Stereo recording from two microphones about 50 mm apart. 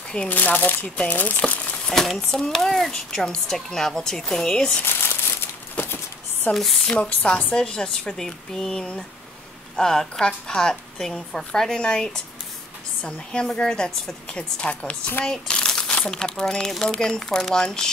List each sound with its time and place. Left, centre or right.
0.3 s speech: left
0.8 s a woman's voice: left
1.1 s speech: left
1.4 s crumpling: left
1.9 s speech: centre
4.5 s a woman's voice: centre
4.8 s crumpling: left
6.5 s speech: centre
7.0 s a woman's voice: left
7.5 s a woman's voice: centre
14.3 s a woman's voice: left